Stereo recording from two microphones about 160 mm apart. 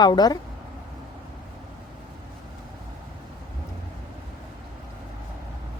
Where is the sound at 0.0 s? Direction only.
25° left (ahead or behind).